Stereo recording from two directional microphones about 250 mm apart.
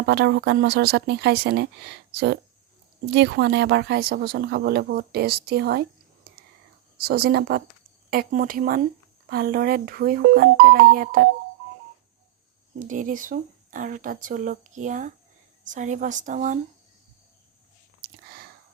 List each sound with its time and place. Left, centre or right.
0.0 s speech: right
7.0 s speech: right
12.8 s a woman's voice: right
18.0 s a sound: right